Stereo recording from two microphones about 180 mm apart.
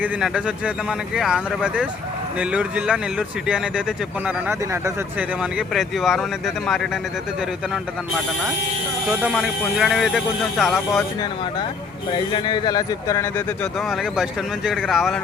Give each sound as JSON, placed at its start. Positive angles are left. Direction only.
{"t": 0.0, "sound": "speech", "side_deg": -5}
{"t": 9.0, "sound": "speech", "side_deg": -5}
{"t": 12.1, "sound": "speech", "side_deg": 25}
{"t": 13.6, "sound": "speech", "side_deg": 0}